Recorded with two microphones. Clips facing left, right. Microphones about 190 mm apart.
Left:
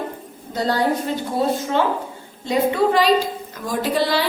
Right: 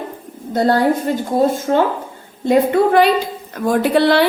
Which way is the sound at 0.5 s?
55° right (ahead or behind).